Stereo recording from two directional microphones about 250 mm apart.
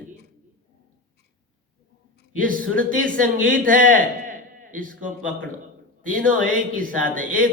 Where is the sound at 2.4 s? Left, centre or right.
Right.